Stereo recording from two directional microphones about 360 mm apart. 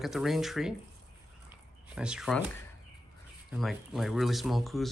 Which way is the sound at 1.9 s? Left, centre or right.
Centre.